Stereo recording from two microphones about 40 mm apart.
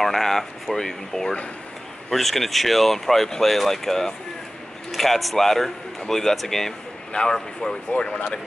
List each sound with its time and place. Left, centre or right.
0.0 s a sound: centre
0.7 s speech: centre
7.1 s speech: left